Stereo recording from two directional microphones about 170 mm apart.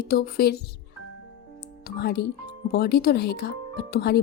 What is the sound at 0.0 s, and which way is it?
Speech, 65° left (ahead or behind).